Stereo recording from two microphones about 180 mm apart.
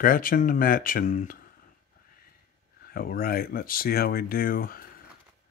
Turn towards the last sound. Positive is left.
turn(degrees=55)  # may be behind; listen again after turning